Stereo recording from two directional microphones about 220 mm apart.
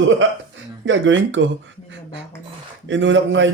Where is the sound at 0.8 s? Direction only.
60° right (ahead or behind).